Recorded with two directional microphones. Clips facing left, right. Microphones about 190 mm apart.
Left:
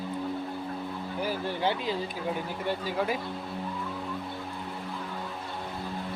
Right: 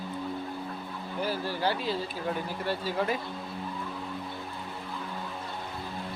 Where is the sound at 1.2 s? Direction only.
15° left (ahead or behind).